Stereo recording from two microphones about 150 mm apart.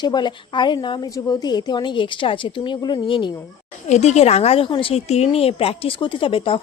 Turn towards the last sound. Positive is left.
turn(degrees=35)  # may be behind; listen again after turning